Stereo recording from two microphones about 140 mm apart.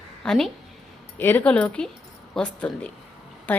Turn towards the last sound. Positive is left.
turn(degrees=10)  # may be behind; listen again after turning